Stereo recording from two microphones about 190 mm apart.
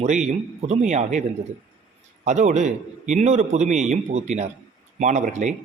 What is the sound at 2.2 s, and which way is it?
A man's voice, 40° right (ahead or behind).